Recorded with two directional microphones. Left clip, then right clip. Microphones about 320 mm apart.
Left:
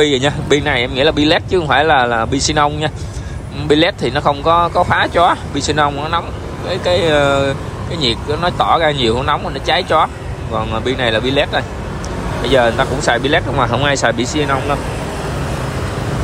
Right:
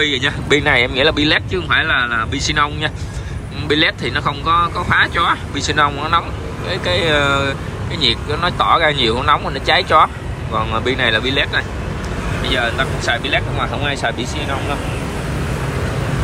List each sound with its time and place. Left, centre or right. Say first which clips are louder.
0.0 s speech: left 3 dB; centre